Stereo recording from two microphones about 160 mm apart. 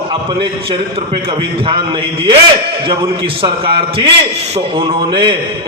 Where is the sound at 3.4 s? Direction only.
35° right (ahead or behind).